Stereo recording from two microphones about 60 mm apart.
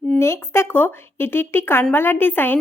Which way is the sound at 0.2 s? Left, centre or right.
Left.